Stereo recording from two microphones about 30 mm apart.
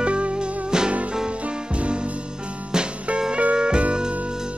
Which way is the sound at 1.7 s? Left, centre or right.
Right.